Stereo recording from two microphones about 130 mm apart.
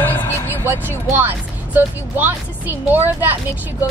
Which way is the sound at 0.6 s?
15° right (ahead or behind).